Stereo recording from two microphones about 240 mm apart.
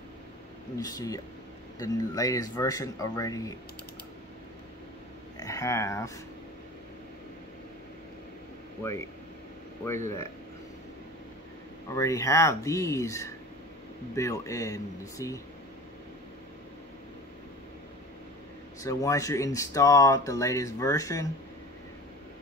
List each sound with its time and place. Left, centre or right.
0.7 s speech: centre
5.4 s speech: centre
11.9 s speech: centre
18.8 s speech: centre